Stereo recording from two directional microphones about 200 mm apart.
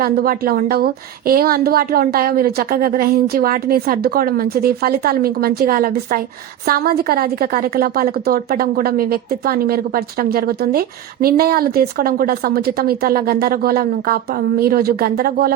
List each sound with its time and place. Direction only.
0.0 s a woman's voice: 45° right (ahead or behind)